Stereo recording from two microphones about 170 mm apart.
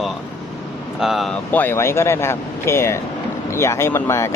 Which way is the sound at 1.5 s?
10° left (ahead or behind).